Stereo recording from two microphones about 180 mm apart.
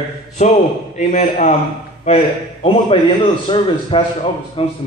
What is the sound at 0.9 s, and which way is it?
A man's voice, 40° left (ahead or behind).